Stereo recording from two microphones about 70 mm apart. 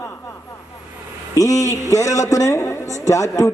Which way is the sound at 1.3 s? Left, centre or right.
Left.